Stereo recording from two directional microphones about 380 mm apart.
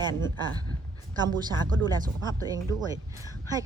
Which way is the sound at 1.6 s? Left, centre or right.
Right.